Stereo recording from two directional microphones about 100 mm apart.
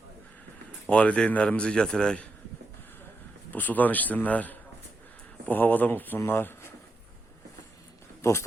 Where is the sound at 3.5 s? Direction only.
15° left (ahead or behind).